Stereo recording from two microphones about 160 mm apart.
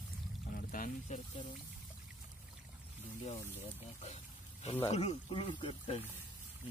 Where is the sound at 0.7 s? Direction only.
55° left (ahead or behind).